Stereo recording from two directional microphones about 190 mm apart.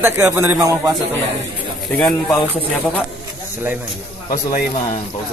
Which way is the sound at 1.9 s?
5° left (ahead or behind).